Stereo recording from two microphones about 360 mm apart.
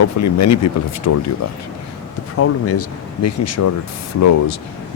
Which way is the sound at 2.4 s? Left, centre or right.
Left.